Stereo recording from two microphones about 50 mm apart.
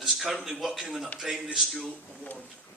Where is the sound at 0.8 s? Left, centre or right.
Centre.